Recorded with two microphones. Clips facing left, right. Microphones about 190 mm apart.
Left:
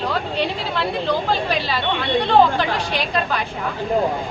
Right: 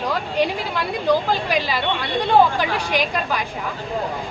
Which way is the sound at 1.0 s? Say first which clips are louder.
Right 5 dB; 10° right (ahead or behind).